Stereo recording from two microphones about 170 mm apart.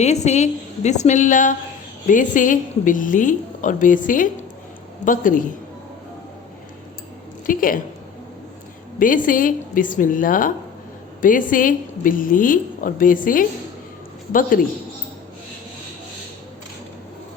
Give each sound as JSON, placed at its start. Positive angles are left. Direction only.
{"t": 0.0, "sound": "a woman's voice", "side_deg": 40}
{"t": 7.4, "sound": "a woman's voice", "side_deg": 55}
{"t": 9.0, "sound": "a woman's voice", "side_deg": 50}